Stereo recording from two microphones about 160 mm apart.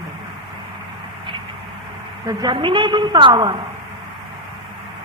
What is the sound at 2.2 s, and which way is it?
A woman's voice, 30° right (ahead or behind).